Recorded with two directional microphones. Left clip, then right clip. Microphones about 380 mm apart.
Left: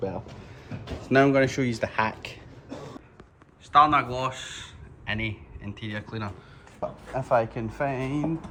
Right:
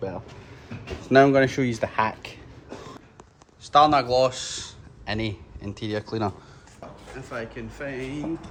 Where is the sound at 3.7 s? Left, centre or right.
Centre.